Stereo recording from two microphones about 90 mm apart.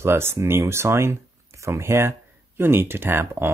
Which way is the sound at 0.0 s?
25° right (ahead or behind).